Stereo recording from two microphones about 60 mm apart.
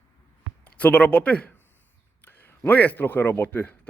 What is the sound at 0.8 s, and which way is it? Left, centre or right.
Speech, left.